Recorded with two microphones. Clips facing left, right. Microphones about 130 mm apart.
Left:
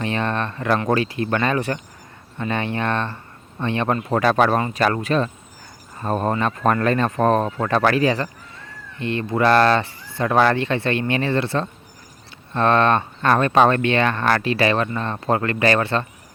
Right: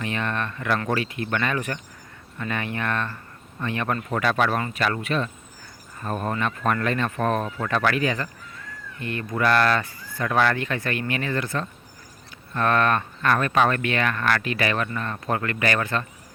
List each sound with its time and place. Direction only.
0.0 s speech: 30° left (ahead or behind)